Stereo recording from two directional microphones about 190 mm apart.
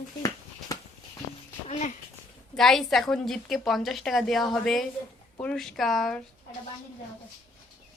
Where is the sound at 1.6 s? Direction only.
35° left (ahead or behind).